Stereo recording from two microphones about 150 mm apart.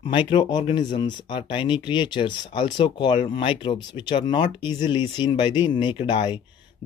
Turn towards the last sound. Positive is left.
turn(degrees=30)  # may be behind; listen again after turning